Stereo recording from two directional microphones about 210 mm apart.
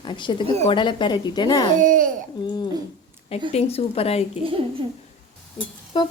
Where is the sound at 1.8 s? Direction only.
40° right (ahead or behind).